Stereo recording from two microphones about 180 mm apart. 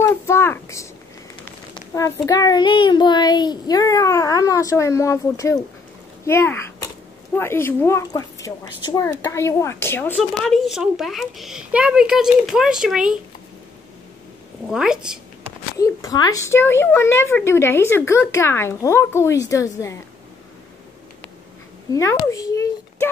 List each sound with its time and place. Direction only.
0.0 s a sound: 15° left (ahead or behind)
2.0 s a child's voice: 20° left (ahead or behind)
10.1 s speech: centre (ahead or behind)
14.7 s speech: 5° right (ahead or behind)
15.8 s a woman's voice: 20° left (ahead or behind)
21.9 s a child's voice: 20° left (ahead or behind)